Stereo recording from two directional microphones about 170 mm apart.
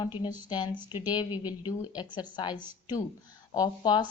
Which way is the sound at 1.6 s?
25° left (ahead or behind).